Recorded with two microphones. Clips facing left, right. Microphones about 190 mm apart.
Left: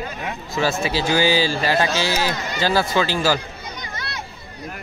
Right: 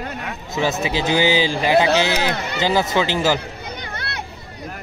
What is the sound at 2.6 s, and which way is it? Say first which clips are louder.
Speech: right 1 dB; 20° right (ahead or behind).